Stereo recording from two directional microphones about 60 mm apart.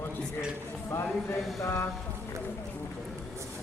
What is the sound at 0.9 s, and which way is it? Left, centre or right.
Speech, left.